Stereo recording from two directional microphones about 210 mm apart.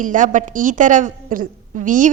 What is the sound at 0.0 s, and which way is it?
A woman's voice, 40° right (ahead or behind).